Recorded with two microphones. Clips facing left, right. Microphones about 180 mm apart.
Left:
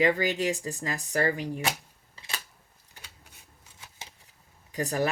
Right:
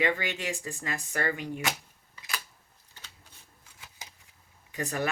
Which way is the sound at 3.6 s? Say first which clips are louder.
Left 2 dB; 25° left (ahead or behind).